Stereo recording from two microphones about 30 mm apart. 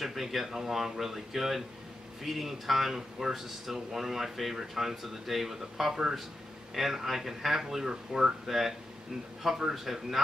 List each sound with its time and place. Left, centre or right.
0.0 s speech: centre
8.5 s speech: centre